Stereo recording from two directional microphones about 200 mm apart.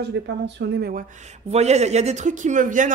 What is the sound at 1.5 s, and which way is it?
A man's voice, 35° right (ahead or behind).